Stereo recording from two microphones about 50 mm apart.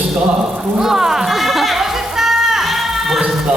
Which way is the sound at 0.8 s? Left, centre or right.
Centre.